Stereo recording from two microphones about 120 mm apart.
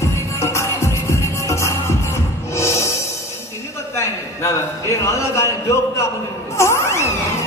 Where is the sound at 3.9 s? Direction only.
25° left (ahead or behind).